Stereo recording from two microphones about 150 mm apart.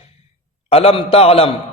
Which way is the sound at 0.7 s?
40° left (ahead or behind).